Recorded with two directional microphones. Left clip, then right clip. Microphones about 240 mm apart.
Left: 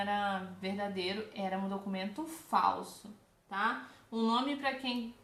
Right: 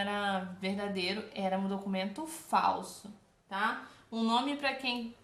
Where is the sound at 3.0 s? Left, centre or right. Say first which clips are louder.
Right 1 dB; right.